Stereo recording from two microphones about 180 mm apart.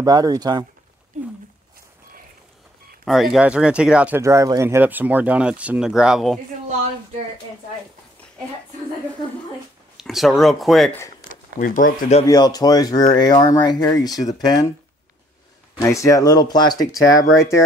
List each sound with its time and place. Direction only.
0.0 s speech: 20° right (ahead or behind)
3.1 s speech: centre (ahead or behind)
9.9 s speech: centre (ahead or behind)
11.2 s speech: 50° left (ahead or behind)
12.3 s speech: 20° left (ahead or behind)
15.8 s speech: 15° left (ahead or behind)